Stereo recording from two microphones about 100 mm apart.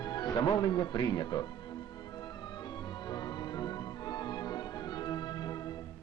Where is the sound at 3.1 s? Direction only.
45° left (ahead or behind).